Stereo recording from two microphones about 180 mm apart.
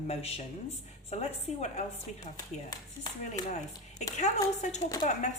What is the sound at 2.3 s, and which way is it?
Speech, 20° left (ahead or behind).